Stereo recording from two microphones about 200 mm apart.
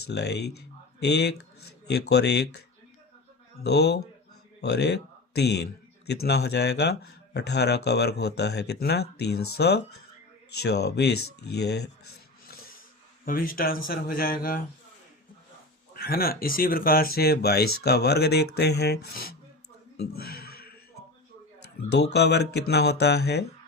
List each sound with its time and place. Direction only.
0.1 s speech: 55° left (ahead or behind)
3.6 s speech: 55° left (ahead or behind)
13.2 s speech: 45° left (ahead or behind)
16.0 s speech: 50° left (ahead or behind)
20.0 s music: 50° left (ahead or behind)
21.8 s speech: 55° left (ahead or behind)